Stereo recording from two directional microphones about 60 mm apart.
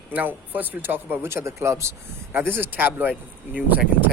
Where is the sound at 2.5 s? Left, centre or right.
Right.